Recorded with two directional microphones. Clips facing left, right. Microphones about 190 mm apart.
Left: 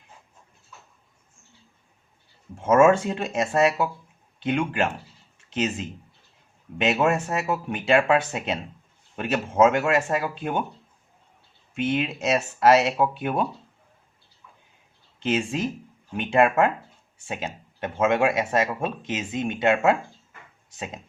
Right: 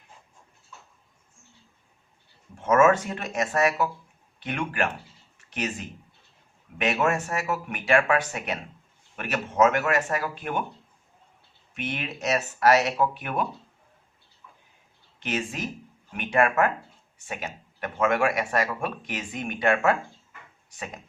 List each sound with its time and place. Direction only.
2.6 s speech: 25° left (ahead or behind)
11.7 s speech: 25° left (ahead or behind)
15.2 s speech: 25° left (ahead or behind)